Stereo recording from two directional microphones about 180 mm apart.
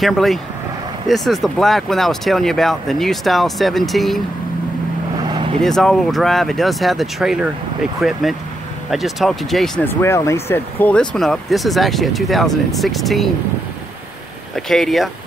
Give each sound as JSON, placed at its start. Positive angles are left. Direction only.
{"t": 0.0, "sound": "speech", "side_deg": 0}
{"t": 5.3, "sound": "vehicle", "side_deg": -30}
{"t": 5.6, "sound": "speech", "side_deg": 0}
{"t": 9.8, "sound": "speech", "side_deg": 15}
{"t": 14.5, "sound": "speech", "side_deg": 0}